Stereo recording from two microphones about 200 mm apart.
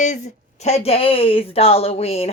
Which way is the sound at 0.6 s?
30° left (ahead or behind).